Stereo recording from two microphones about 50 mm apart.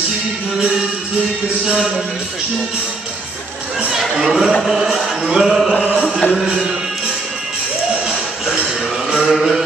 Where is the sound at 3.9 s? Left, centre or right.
Centre.